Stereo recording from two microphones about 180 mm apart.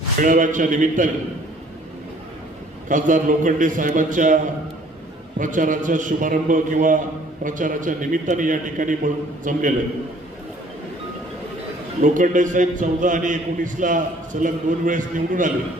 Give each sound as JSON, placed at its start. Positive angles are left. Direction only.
{"t": 0.2, "sound": "a man's voice", "side_deg": -45}
{"t": 2.9, "sound": "a man's voice", "side_deg": -45}
{"t": 5.4, "sound": "a man's voice", "side_deg": -45}
{"t": 12.0, "sound": "a man's voice", "side_deg": -45}